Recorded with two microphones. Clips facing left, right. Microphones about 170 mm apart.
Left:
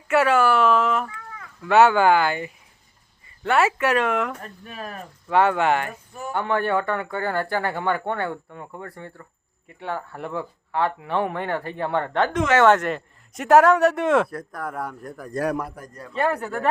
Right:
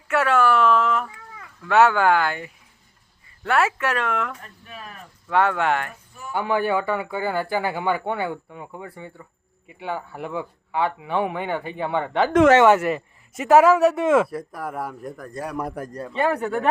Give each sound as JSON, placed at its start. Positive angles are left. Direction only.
{"t": 0.1, "sound": "a sound", "side_deg": 5}
{"t": 1.6, "sound": "speech", "side_deg": 0}
{"t": 4.6, "sound": "speech", "side_deg": 45}
{"t": 5.3, "sound": "speech", "side_deg": 0}
{"t": 15.9, "sound": "speech", "side_deg": -30}
{"t": 16.1, "sound": "speech", "side_deg": 0}